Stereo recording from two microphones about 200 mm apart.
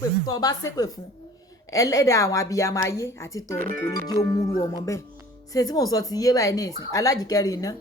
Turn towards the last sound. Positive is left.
turn(degrees=15)  # may be behind; listen again after turning